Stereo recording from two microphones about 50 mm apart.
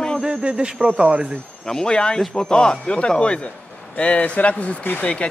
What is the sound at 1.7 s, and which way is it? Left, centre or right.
A man's voice, centre.